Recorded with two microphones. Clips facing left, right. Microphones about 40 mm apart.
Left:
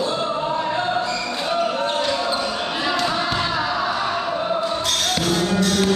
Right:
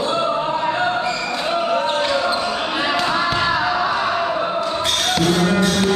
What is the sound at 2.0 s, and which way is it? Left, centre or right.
Basketball bounce, right.